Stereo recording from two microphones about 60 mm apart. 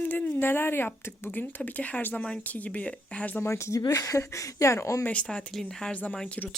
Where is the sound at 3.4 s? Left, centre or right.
Left.